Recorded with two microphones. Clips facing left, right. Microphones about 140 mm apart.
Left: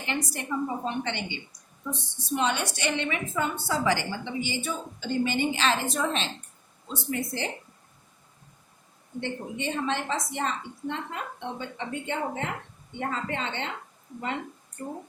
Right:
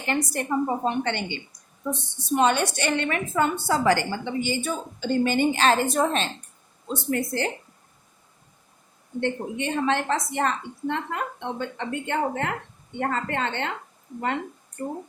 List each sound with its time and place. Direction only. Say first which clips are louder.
0.0 s a woman's voice: right 5 dB; 50° right (ahead or behind)
9.2 s a woman's voice: right 5 dB; 60° right (ahead or behind)